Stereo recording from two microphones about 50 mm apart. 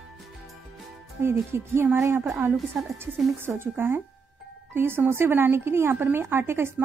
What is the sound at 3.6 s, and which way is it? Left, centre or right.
Speech, right.